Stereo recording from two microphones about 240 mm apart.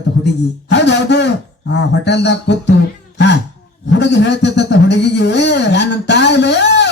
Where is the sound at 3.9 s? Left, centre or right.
Left.